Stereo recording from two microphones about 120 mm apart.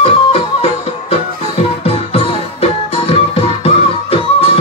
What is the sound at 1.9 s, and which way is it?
Music, 55° left (ahead or behind).